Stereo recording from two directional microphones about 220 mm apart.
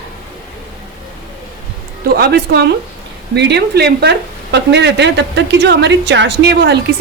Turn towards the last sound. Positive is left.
turn(degrees=-50)  # may be behind; listen again after turning